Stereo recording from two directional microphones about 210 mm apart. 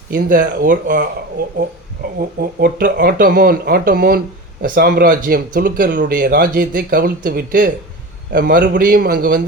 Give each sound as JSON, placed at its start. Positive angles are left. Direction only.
{"t": 0.1, "sound": "a man's voice", "side_deg": -40}
{"t": 2.1, "sound": "a man's voice", "side_deg": -45}